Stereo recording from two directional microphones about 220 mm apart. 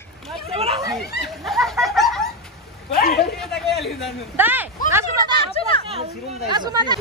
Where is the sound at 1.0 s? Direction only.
45° left (ahead or behind).